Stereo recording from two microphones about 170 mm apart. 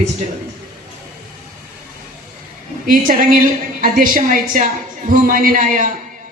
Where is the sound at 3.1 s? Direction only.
50° right (ahead or behind).